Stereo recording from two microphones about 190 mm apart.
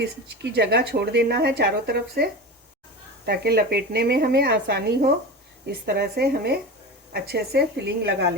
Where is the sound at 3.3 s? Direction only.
60° right (ahead or behind).